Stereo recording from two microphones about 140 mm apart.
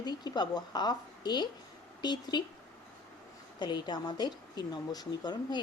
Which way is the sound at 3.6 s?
30° left (ahead or behind).